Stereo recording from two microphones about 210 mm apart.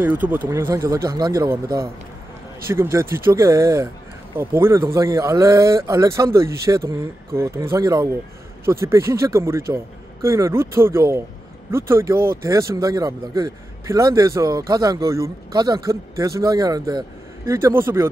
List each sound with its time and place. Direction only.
0.0 s speech: 10° right (ahead or behind)